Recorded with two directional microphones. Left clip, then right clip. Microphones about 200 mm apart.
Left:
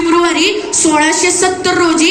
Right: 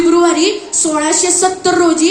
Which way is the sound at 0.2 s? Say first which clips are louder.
Even; 45° right (ahead or behind).